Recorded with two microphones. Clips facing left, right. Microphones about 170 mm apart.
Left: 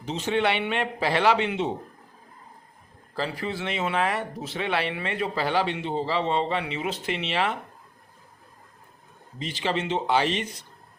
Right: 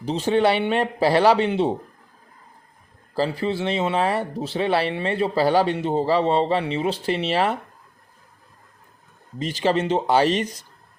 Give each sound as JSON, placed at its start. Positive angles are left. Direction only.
{"t": 0.0, "sound": "speech", "side_deg": -35}
{"t": 3.2, "sound": "speech", "side_deg": -30}
{"t": 9.4, "sound": "speech", "side_deg": -40}